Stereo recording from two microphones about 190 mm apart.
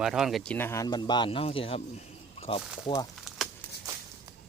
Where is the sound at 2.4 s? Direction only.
30° left (ahead or behind).